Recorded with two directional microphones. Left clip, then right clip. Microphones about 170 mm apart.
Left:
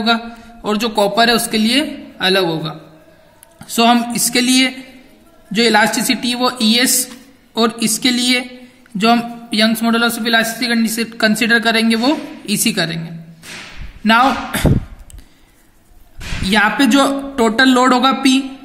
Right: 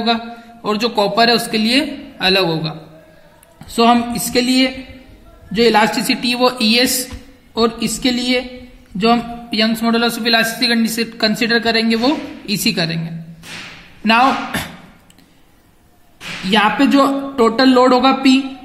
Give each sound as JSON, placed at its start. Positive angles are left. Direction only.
{"t": 0.0, "sound": "a man's voice", "side_deg": 45}
{"t": 3.6, "sound": "a man's voice", "side_deg": 60}
{"t": 7.5, "sound": "a man's voice", "side_deg": 50}
{"t": 16.4, "sound": "a man's voice", "side_deg": 50}